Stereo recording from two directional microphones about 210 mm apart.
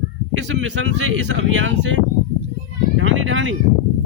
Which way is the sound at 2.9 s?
60° right (ahead or behind).